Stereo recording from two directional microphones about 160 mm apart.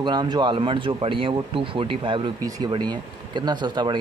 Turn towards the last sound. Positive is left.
turn(degrees=-30)  # may be behind; listen again after turning